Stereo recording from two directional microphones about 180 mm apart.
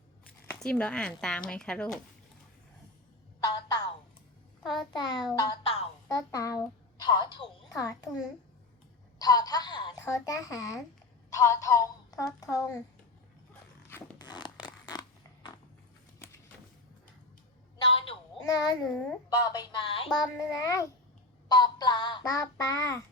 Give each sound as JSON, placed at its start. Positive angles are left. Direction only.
{"t": 0.6, "sound": "speech", "side_deg": 5}
{"t": 3.4, "sound": "a sound", "side_deg": 20}
{"t": 4.6, "sound": "a child's voice", "side_deg": 0}
{"t": 4.9, "sound": "child singing", "side_deg": 20}
{"t": 5.6, "sound": "music", "side_deg": 35}
{"t": 6.1, "sound": "a child's voice", "side_deg": 20}
{"t": 9.1, "sound": "a sound", "side_deg": 20}
{"t": 10.0, "sound": "child singing", "side_deg": 20}
{"t": 11.3, "sound": "speech", "side_deg": 20}
{"t": 14.2, "sound": "scissors", "side_deg": 25}
{"t": 17.9, "sound": "a sound", "side_deg": 30}
{"t": 18.4, "sound": "child singing", "side_deg": 20}